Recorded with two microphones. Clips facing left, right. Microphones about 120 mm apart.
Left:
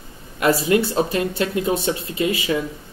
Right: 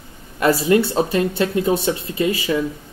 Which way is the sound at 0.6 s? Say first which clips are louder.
Right 2 dB; 30° right (ahead or behind).